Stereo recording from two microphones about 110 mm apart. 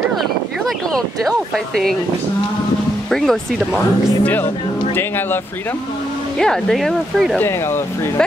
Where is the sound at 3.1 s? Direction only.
Centre (ahead or behind).